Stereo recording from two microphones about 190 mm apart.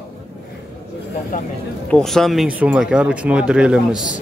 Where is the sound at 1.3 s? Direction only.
45° left (ahead or behind).